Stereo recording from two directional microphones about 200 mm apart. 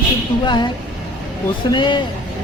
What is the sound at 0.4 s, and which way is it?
Speech, 25° left (ahead or behind).